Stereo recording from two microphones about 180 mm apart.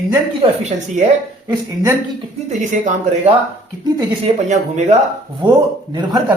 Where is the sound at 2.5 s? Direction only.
40° right (ahead or behind).